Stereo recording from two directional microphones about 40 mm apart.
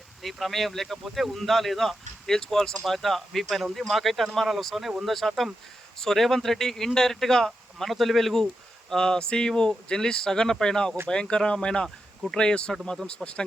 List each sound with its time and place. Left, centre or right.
0.2 s speech: centre
7.9 s speech: centre
8.9 s speech: centre